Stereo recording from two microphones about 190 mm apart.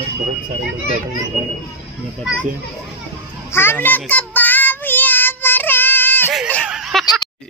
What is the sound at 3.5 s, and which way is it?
Child singing, 10° left (ahead or behind).